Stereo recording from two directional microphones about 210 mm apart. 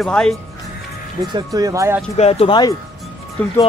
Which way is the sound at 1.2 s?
20° right (ahead or behind).